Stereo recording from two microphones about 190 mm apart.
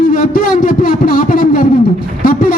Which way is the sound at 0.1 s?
45° left (ahead or behind).